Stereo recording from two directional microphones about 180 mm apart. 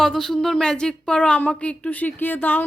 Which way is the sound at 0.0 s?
Centre (ahead or behind).